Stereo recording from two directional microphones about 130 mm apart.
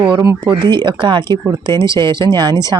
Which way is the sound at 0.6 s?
35° right (ahead or behind).